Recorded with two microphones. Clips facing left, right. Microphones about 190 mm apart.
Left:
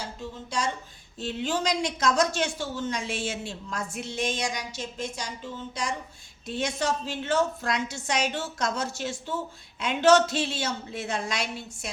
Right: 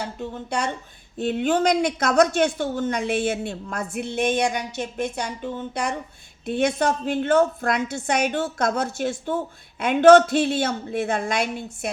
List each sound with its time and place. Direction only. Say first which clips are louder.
0.0 s speech: right 6 dB; 60° right (ahead or behind)